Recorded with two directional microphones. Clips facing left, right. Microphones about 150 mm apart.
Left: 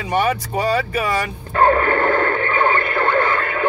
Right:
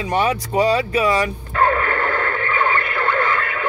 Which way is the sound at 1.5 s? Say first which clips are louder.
Left 4 dB; 30° left (ahead or behind).